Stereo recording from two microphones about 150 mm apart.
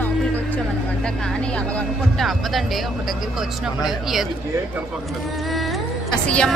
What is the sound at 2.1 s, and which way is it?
Speech, centre (ahead or behind).